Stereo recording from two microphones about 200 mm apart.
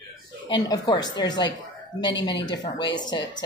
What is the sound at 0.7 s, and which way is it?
Speech, 20° left (ahead or behind).